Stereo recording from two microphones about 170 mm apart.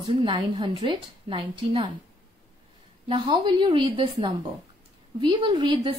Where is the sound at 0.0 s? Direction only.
30° right (ahead or behind).